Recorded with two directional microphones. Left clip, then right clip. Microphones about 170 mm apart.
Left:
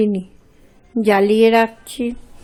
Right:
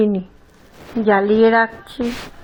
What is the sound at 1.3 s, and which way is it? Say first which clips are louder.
Speech: right 1 dB; 40° left (ahead or behind).